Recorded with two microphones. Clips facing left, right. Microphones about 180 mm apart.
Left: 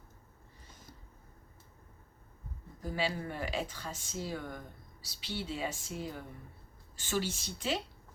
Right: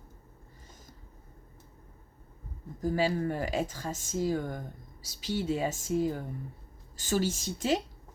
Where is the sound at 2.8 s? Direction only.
45° right (ahead or behind).